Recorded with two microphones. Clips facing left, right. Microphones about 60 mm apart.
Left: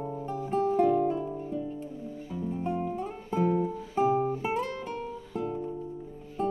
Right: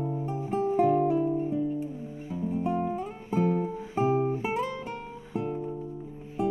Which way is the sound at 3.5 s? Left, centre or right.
Right.